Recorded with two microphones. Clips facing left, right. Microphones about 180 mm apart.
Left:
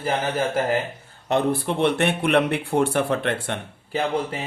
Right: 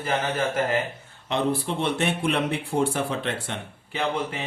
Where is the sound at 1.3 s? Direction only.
55° left (ahead or behind).